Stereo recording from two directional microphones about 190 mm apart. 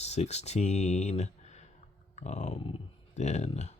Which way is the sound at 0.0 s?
35° left (ahead or behind).